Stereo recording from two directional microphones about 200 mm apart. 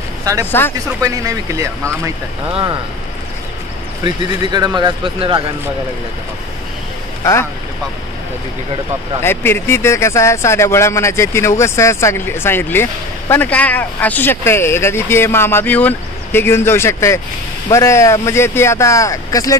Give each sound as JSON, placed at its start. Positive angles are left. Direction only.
{"t": 0.2, "sound": "speech", "side_deg": -15}
{"t": 0.5, "sound": "speech", "side_deg": 10}
{"t": 1.0, "sound": "speech", "side_deg": -15}
{"t": 4.0, "sound": "speech", "side_deg": -20}
{"t": 9.2, "sound": "speech", "side_deg": 10}